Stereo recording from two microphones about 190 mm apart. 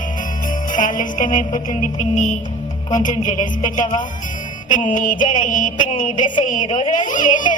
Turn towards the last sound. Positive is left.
turn(degrees=45)  # may be behind; listen again after turning